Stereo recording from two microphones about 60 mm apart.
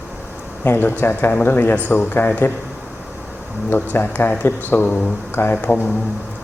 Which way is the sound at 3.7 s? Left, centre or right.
Left.